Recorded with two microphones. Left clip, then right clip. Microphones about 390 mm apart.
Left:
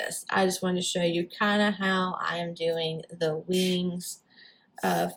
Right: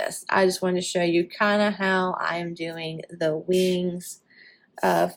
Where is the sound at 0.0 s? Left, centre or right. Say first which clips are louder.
Right 5 dB; centre.